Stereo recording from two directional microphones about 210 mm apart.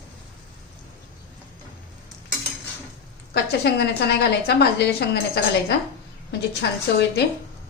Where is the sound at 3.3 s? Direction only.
50° left (ahead or behind).